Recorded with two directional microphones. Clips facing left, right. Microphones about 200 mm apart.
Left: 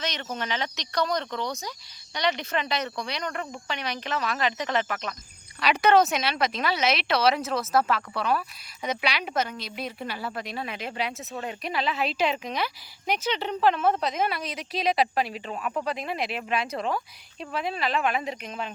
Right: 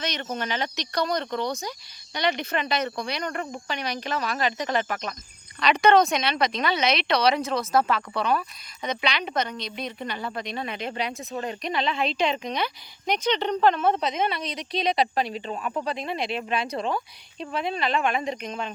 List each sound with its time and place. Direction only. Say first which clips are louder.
0.3 s speech: right 2 dB; 50° right (ahead or behind)
1.3 s speech: right 3 dB; 25° right (ahead or behind)
2.1 s speech: right 1 dB; 55° right (ahead or behind)
5.5 s speech: right 1 dB; 5° left (ahead or behind)